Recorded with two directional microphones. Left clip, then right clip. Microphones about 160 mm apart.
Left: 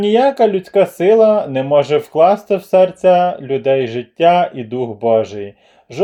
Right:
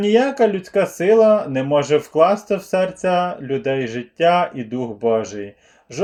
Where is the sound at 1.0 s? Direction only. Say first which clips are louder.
Left 2 dB; 50° left (ahead or behind).